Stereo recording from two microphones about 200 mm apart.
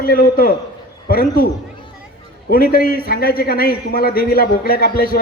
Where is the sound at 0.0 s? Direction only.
50° left (ahead or behind).